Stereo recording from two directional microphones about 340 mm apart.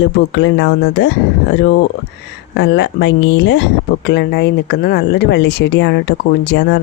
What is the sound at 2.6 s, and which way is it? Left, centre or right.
Speech, left.